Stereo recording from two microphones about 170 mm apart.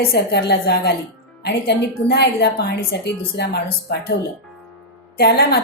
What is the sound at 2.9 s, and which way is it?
Speech, 80° left.